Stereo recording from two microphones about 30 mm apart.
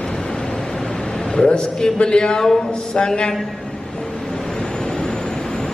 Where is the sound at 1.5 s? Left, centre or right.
Left.